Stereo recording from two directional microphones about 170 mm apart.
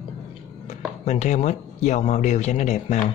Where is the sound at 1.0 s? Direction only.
40° left (ahead or behind).